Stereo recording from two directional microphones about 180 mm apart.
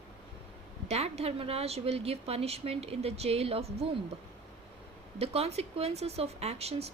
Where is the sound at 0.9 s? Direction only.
35° right (ahead or behind).